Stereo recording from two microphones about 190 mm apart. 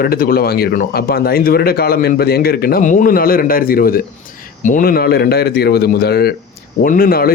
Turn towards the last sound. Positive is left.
turn(degrees=50)  # may be behind; listen again after turning